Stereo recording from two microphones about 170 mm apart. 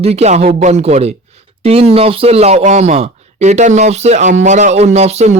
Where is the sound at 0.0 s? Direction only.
40° right (ahead or behind).